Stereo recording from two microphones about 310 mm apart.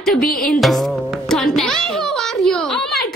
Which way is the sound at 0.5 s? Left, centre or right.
Centre.